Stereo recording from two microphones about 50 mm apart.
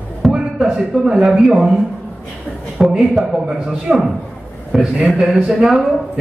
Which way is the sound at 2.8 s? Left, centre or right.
Centre.